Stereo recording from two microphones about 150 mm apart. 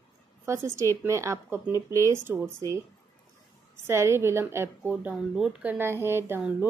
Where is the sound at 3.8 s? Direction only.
15° right (ahead or behind).